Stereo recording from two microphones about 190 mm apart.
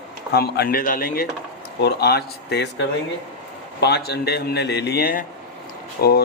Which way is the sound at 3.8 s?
60° left (ahead or behind).